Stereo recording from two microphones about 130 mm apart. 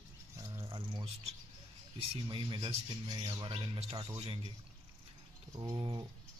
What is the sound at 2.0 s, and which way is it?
Speech, 40° right (ahead or behind).